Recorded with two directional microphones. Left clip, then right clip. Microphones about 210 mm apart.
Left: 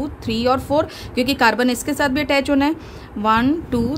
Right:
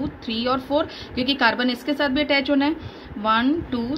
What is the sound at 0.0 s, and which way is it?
A woman's voice, 50° left (ahead or behind).